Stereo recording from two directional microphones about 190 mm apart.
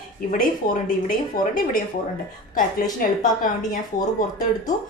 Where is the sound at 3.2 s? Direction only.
45° left (ahead or behind).